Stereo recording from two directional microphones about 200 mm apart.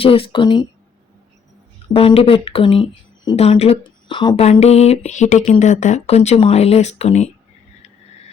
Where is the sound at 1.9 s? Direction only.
25° left (ahead or behind).